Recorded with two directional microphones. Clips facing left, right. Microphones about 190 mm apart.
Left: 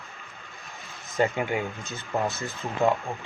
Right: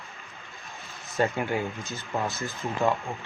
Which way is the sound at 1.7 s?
Centre (ahead or behind).